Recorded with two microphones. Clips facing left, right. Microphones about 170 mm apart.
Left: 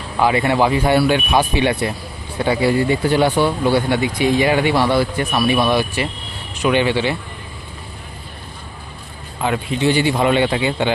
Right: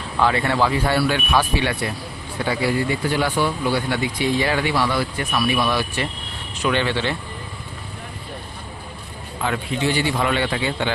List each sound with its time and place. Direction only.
0.2 s speech: 15° left (ahead or behind)
9.4 s speech: 20° left (ahead or behind)